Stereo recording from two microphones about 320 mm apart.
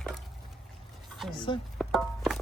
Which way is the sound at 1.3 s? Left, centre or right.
Centre.